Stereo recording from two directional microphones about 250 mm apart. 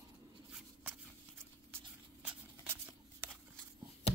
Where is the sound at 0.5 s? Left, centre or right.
Centre.